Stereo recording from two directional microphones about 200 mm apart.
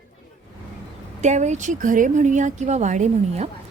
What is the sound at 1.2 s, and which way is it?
A woman's voice, 35° right (ahead or behind).